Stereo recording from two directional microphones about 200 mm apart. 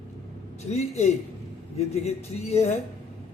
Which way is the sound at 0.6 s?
35° left (ahead or behind).